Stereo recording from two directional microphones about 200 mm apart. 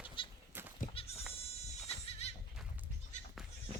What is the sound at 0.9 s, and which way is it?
Goat, 30° left (ahead or behind).